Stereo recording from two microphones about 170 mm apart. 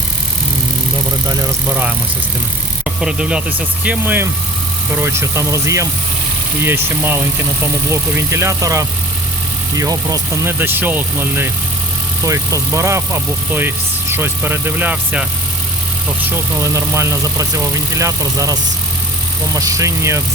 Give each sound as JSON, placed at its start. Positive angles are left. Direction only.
{"t": 3.0, "sound": "speech", "side_deg": -5}
{"t": 16.7, "sound": "speech", "side_deg": -20}
{"t": 19.5, "sound": "speech", "side_deg": -20}